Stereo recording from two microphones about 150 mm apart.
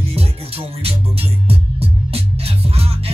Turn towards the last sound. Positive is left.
turn(degrees=-40)  # may be behind; listen again after turning